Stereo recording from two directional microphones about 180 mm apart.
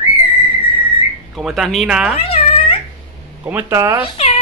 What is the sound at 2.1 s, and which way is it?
Cat, 30° left (ahead or behind).